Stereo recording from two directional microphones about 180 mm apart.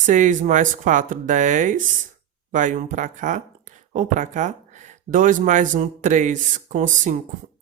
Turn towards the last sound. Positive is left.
turn(degrees=-45)  # may be behind; listen again after turning